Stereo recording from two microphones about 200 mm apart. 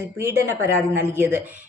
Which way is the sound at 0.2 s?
10° right (ahead or behind).